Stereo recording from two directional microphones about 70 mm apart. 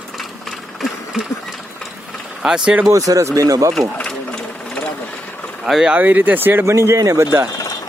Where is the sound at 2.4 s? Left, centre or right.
Centre.